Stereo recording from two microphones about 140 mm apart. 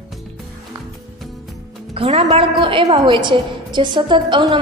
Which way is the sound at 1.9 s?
50° right (ahead or behind).